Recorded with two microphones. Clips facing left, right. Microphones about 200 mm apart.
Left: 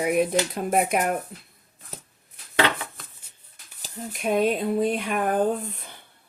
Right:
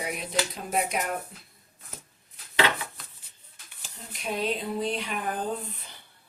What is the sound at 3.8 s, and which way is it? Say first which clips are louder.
Speech: left 8 dB; 50° left (ahead or behind).